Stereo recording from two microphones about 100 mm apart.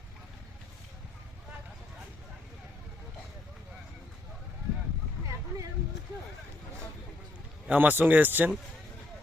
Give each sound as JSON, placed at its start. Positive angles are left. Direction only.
{"t": 7.7, "sound": "speech", "side_deg": -20}